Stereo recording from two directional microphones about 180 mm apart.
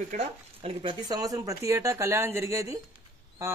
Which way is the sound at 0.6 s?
25° right (ahead or behind).